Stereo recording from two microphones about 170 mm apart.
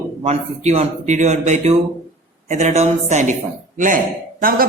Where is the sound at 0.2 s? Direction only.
40° right (ahead or behind).